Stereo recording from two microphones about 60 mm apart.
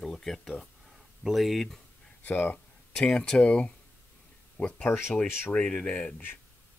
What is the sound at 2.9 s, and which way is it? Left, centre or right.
Speech, centre.